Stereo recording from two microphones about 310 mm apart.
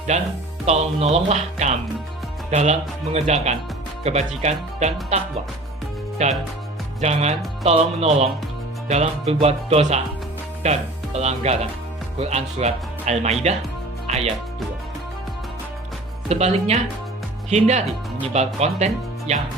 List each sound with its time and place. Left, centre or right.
0.1 s speech: right
6.2 s speech: right
16.3 s speech: right